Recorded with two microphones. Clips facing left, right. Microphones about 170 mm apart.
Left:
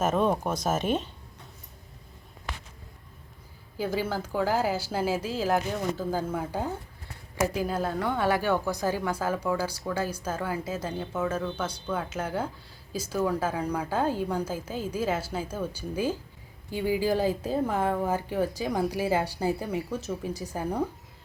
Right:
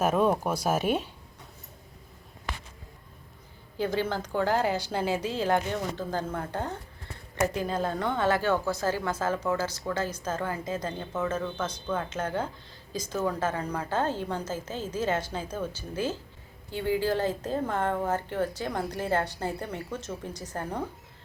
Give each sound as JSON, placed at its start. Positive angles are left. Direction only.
{"t": 0.0, "sound": "speech", "side_deg": -10}
{"t": 3.8, "sound": "a woman's voice", "side_deg": 5}